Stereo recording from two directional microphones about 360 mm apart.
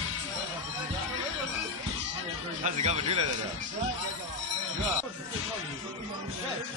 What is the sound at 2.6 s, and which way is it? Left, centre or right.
Speech, centre.